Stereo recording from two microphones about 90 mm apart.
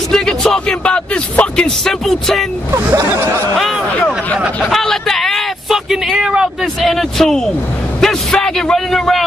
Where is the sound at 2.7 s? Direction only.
30° right (ahead or behind).